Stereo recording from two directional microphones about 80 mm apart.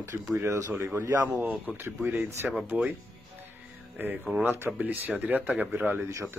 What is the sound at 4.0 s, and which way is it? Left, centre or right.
Speech, right.